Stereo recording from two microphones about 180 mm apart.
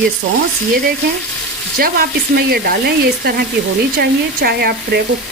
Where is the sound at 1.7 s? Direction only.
55° right (ahead or behind).